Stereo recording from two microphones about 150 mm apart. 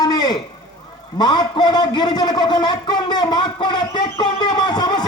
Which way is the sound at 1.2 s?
30° left (ahead or behind).